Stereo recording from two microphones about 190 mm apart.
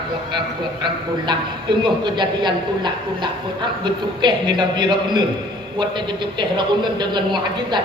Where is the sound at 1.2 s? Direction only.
25° right (ahead or behind).